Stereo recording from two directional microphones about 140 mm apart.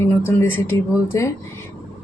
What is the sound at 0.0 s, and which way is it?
Speech, 15° left (ahead or behind).